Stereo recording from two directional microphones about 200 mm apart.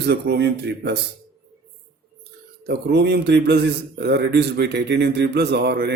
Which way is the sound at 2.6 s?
55° right (ahead or behind).